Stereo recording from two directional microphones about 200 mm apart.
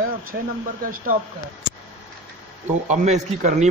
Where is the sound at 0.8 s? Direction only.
45° right (ahead or behind).